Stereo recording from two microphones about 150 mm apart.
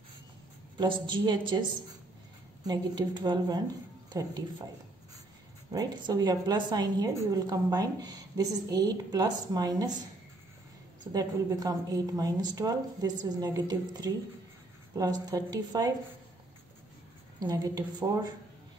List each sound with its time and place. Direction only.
0.7 s a woman's voice: 30° right (ahead or behind)
2.6 s a woman's voice: 25° right (ahead or behind)
5.7 s a woman's voice: 25° right (ahead or behind)
11.1 s a woman's voice: 25° right (ahead or behind)
17.4 s a woman's voice: 25° right (ahead or behind)